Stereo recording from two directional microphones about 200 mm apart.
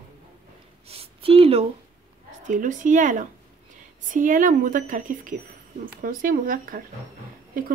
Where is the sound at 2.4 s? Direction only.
40° right (ahead or behind).